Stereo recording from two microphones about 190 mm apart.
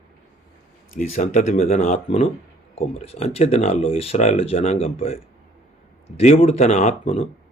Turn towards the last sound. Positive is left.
turn(degrees=35)  # may be behind; listen again after turning